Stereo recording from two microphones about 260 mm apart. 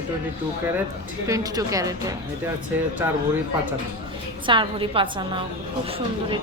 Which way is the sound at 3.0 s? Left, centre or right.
Centre.